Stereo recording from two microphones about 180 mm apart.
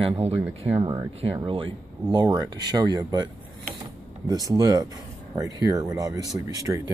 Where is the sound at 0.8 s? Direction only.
15° right (ahead or behind).